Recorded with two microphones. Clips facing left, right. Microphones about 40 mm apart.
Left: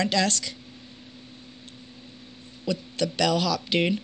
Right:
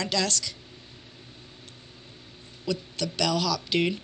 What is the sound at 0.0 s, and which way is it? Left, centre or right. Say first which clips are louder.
Speech: left 3 dB; left.